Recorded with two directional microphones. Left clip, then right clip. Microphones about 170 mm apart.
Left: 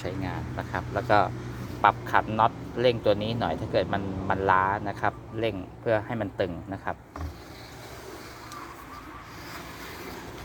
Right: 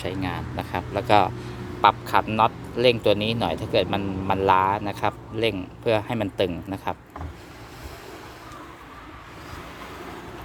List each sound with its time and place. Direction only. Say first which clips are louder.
0.0 s speech: right 4 dB; 30° right (ahead or behind)